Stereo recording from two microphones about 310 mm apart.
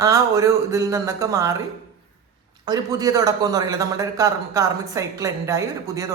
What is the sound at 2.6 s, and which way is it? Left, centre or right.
A man's voice, centre.